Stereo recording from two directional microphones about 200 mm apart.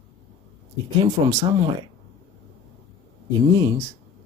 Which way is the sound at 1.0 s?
15° right (ahead or behind).